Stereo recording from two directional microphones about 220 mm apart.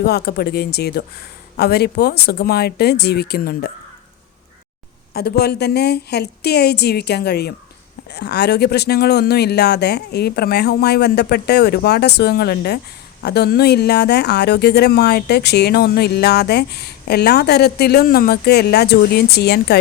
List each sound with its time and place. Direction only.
0.0 s speech: 45° left (ahead or behind)
5.1 s speech: 45° left (ahead or behind)